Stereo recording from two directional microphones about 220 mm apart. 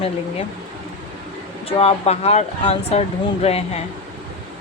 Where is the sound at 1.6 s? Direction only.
30° left (ahead or behind).